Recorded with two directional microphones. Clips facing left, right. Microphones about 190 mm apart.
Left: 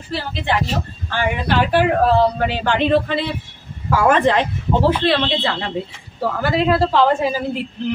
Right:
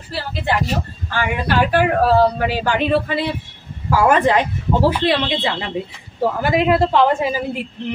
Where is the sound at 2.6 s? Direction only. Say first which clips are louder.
Left 3 dB; 10° right (ahead or behind).